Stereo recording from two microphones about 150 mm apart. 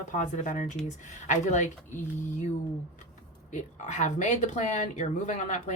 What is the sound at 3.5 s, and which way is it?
Speech, 50° left (ahead or behind).